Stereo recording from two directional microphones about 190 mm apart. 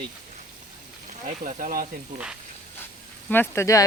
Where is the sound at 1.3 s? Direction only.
45° right (ahead or behind).